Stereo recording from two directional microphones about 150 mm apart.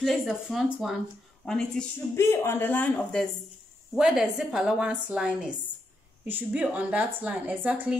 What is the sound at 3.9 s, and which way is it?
A woman's voice, 5° right (ahead or behind).